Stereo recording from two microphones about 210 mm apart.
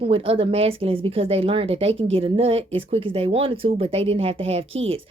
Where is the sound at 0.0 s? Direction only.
25° right (ahead or behind).